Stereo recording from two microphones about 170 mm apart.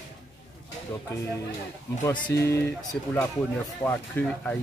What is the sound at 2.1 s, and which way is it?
Speech, 15° left (ahead or behind).